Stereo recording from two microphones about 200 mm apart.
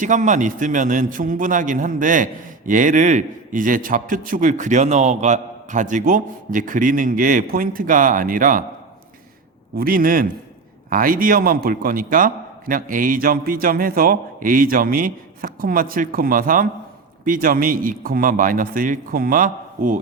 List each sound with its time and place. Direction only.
0.0 s a man's voice: 40° right (ahead or behind)
9.7 s a man's voice: 45° right (ahead or behind)